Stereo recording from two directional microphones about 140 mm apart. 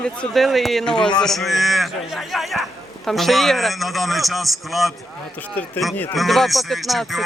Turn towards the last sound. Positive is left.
turn(degrees=0)  # may be behind; listen again after turning